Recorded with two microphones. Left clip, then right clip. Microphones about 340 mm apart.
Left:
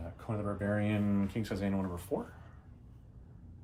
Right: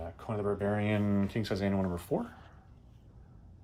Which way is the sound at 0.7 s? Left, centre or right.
Right.